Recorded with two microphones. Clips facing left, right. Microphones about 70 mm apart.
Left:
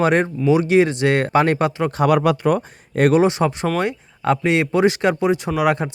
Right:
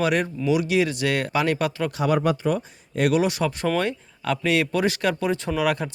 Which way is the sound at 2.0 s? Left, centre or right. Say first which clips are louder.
Left 5 dB; left.